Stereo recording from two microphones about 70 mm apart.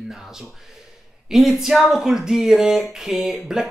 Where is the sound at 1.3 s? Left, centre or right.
Centre.